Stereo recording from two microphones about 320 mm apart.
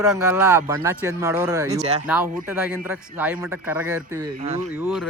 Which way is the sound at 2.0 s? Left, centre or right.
Centre.